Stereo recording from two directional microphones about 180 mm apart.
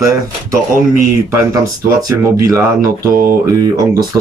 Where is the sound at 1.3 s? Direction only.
15° right (ahead or behind).